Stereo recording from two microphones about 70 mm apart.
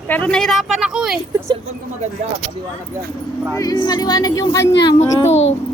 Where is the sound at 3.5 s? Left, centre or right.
Left.